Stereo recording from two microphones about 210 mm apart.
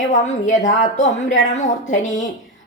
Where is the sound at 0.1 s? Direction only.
35° left (ahead or behind).